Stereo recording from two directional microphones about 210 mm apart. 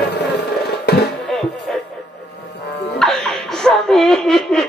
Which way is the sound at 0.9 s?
50° left (ahead or behind).